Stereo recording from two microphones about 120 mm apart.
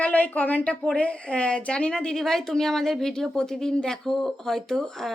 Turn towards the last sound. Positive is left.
turn(degrees=5)  # may be behind; listen again after turning